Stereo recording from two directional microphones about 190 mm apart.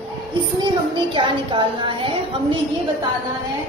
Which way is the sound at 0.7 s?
25° right (ahead or behind).